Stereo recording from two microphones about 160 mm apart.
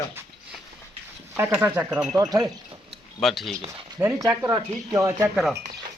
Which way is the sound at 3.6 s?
20° right (ahead or behind).